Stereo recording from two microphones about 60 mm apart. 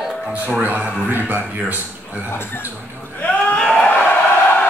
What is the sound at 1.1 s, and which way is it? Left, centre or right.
Speech, right.